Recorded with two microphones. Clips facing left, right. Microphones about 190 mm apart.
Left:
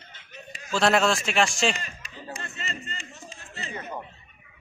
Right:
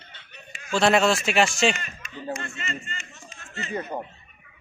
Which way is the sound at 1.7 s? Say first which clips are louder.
Right 2 dB; 35° left (ahead or behind).